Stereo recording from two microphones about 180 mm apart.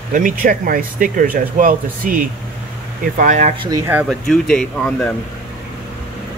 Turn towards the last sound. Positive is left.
turn(degrees=5)  # may be behind; listen again after turning